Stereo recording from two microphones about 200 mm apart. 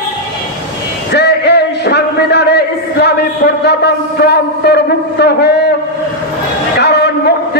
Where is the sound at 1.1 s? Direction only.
55° left (ahead or behind).